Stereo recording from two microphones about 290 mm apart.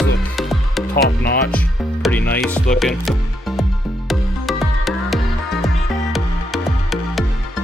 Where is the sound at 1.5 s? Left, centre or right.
Centre.